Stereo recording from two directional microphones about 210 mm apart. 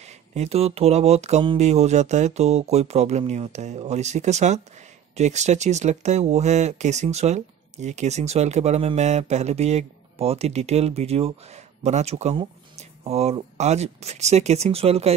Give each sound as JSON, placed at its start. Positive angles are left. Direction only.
{"t": 0.0, "sound": "speech", "side_deg": -30}